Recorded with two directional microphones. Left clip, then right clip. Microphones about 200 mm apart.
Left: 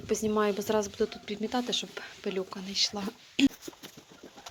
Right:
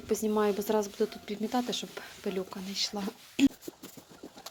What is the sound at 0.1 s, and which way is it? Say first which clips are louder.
Speech: even; centre (ahead or behind).